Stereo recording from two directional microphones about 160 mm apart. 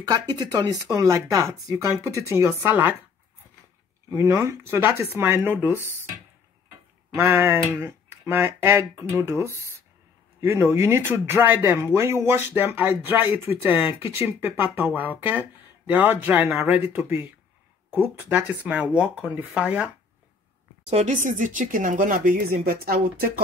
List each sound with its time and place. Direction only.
0.1 s speech: 25° right (ahead or behind)
4.1 s speech: 15° right (ahead or behind)
7.2 s speech: 15° right (ahead or behind)
20.8 s speech: 45° right (ahead or behind); by 23.4 s 65° right (ahead or behind)